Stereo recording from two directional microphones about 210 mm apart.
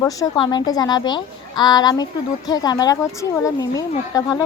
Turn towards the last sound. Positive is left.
turn(degrees=15)  # may be behind; listen again after turning